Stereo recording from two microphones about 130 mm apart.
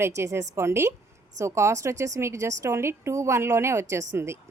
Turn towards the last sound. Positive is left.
turn(degrees=-20)  # may be behind; listen again after turning